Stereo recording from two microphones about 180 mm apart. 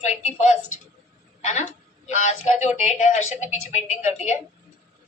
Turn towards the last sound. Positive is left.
turn(degrees=40)  # may be behind; listen again after turning